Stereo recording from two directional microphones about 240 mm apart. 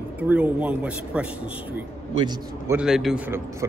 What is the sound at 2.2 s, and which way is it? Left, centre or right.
Speech, centre.